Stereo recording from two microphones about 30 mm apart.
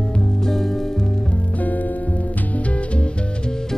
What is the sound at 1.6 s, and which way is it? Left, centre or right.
Music, left.